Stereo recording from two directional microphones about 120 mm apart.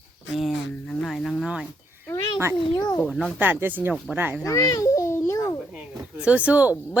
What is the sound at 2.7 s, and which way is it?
Speech, 30° left (ahead or behind).